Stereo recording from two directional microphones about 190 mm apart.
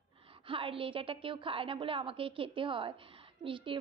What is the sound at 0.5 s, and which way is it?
A woman's voice, 30° right (ahead or behind).